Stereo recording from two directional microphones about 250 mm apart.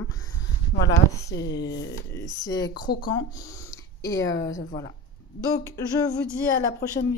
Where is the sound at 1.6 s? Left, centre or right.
Left.